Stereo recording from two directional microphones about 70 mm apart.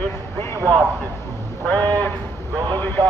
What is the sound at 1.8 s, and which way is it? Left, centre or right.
Speech, right.